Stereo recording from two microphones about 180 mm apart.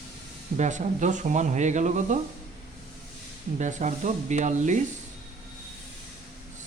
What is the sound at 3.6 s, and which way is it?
Speech, 40° right (ahead or behind).